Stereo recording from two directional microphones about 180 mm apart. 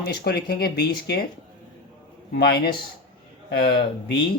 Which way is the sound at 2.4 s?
60° left (ahead or behind).